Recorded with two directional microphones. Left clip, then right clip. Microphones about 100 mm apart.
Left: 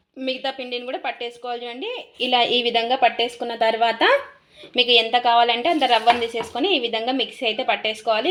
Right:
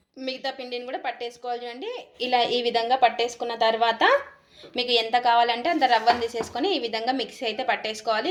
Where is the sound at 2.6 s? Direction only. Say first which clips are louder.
Left 2 dB; 65° left (ahead or behind); by 4.1 s 80° left.